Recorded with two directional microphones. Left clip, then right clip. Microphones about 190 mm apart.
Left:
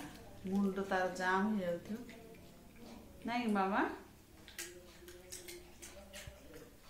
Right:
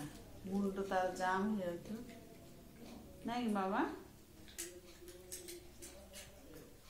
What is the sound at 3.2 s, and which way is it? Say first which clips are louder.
Speech: left 3 dB; 45° left (ahead or behind).